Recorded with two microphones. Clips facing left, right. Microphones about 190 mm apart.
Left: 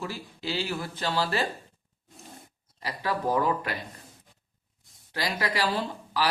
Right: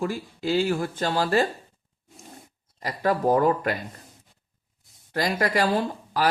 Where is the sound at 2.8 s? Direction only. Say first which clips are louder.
Right 6 dB; 45° right (ahead or behind).